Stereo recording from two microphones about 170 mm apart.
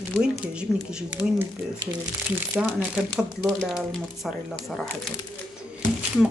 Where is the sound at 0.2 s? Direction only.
5° right (ahead or behind).